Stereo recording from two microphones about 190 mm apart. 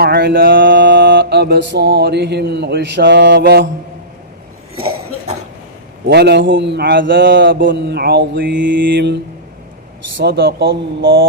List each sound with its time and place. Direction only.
0.0 s mantra: 60° right (ahead or behind)
6.1 s mantra: 60° right (ahead or behind)
10.2 s mantra: 55° right (ahead or behind)
11.0 s mantra: 90° right